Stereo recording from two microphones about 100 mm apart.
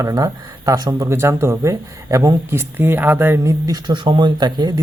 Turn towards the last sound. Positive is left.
turn(degrees=-45)  # may be behind; listen again after turning